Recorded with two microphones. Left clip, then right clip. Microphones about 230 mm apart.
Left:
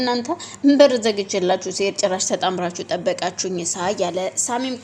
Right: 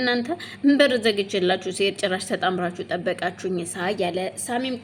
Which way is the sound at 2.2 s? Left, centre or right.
Left.